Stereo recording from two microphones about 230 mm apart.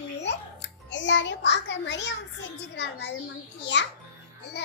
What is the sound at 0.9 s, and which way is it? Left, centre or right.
A child's voice, left.